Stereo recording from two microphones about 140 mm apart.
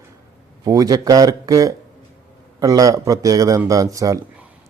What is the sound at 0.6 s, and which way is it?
A man's voice, 25° right (ahead or behind).